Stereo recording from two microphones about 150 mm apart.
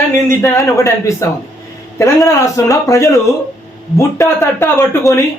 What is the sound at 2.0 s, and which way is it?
A man's voice, 20° left (ahead or behind).